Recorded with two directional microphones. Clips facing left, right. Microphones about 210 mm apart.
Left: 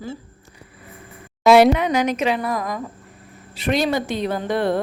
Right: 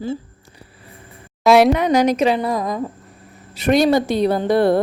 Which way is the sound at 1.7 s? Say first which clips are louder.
Right 4 dB; 40° right (ahead or behind).